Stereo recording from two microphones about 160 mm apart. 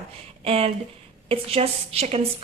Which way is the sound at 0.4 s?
40° right (ahead or behind).